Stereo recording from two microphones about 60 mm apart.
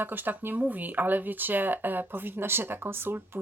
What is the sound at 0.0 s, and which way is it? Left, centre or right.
Speech, right.